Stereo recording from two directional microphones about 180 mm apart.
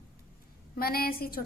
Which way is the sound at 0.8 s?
55° left (ahead or behind).